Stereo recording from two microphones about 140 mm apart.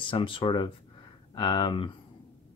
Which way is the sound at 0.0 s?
35° left (ahead or behind).